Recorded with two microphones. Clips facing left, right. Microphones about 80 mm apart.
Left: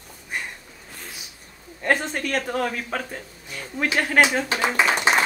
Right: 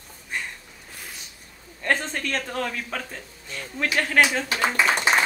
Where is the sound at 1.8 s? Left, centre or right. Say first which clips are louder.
Left 2 dB; centre.